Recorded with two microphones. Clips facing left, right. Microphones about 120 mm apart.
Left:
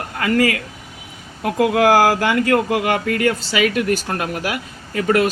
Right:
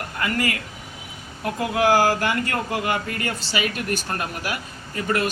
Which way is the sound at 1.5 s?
90° left.